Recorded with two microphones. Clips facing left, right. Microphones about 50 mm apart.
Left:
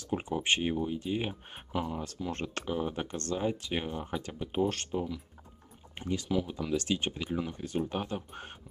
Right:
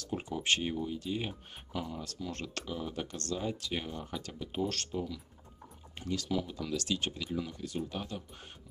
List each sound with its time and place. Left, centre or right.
0.0 s speech: left